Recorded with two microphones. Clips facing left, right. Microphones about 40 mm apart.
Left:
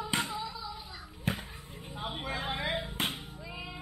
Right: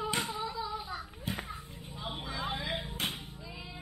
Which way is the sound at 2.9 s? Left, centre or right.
Left.